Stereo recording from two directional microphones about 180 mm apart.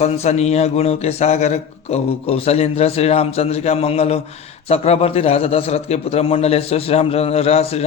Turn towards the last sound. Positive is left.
turn(degrees=35)  # may be behind; listen again after turning